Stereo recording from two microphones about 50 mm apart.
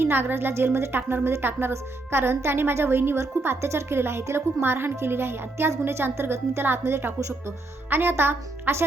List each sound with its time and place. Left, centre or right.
0.0 s a woman's voice: right